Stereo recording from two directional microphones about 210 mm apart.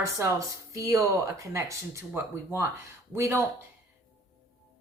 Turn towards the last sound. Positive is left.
turn(degrees=-15)  # may be behind; listen again after turning